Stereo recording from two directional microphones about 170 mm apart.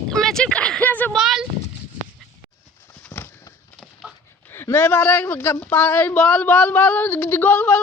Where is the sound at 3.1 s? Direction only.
15° left (ahead or behind).